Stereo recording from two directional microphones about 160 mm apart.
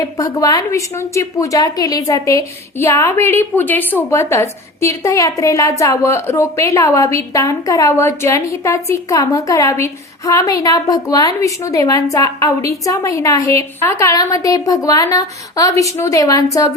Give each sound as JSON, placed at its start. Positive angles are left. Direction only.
{"t": 0.0, "sound": "a woman's voice", "side_deg": 20}